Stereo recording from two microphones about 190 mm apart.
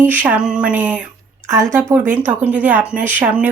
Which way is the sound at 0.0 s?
10° right (ahead or behind).